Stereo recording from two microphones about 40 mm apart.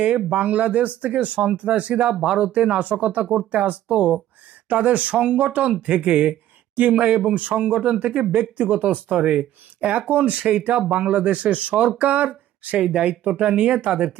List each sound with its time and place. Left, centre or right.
0.3 s speech: right
2.1 s speech: centre
2.4 s speech: right
12.8 s speech: centre
13.1 s speech: right